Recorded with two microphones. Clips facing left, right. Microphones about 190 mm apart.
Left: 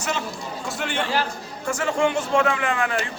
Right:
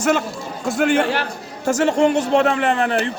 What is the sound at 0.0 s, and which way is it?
A man's voice, 55° right (ahead or behind).